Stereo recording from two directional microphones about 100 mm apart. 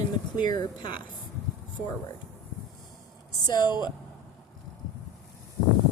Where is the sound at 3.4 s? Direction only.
45° left (ahead or behind).